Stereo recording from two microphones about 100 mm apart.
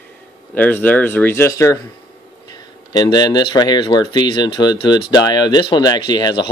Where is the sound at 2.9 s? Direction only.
40° left (ahead or behind).